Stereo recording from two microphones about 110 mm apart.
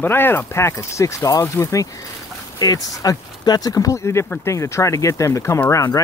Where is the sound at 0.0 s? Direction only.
20° left (ahead or behind).